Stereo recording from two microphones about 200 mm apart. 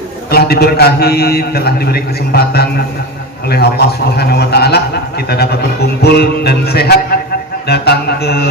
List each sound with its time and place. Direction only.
0.3 s a man's voice: 50° left (ahead or behind)